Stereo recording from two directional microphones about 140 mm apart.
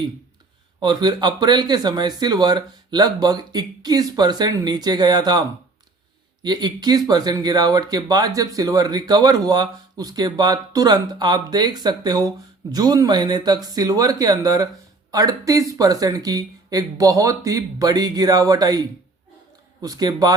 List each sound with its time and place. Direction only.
0.8 s speech: 30° right (ahead or behind)